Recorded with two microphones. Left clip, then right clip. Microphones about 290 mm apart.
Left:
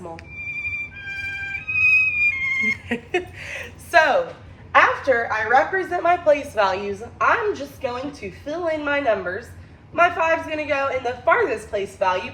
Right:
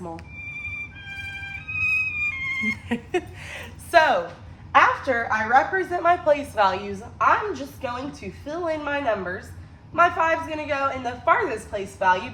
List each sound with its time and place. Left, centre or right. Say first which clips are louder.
1.0 s music: left 5 dB; centre
4.7 s a woman's voice: left 2 dB; centre